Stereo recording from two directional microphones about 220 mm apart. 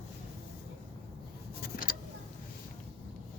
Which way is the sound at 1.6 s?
40° left (ahead or behind).